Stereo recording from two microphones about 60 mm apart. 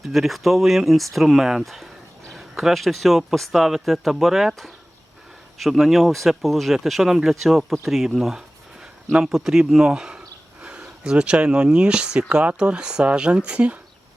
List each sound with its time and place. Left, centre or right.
0.0 s speech: centre
9.2 s a sound: centre
11.0 s speech: centre